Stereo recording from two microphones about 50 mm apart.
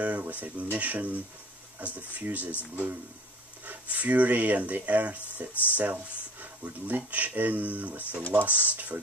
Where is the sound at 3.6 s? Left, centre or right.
Right.